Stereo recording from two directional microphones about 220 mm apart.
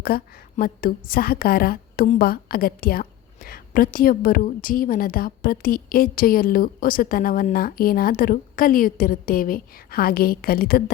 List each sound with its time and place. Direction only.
0.0 s a woman's voice: 40° left (ahead or behind)